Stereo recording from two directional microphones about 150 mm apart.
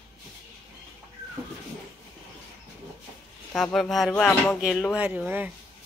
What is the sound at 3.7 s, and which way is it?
Speech, centre (ahead or behind).